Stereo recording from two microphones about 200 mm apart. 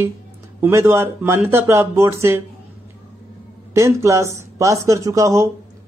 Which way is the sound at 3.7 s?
15° right (ahead or behind).